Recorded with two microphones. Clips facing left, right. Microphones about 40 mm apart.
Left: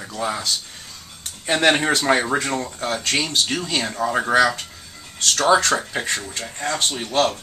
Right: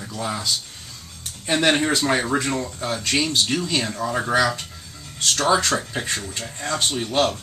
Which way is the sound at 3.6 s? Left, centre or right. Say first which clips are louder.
Left 1 dB; left.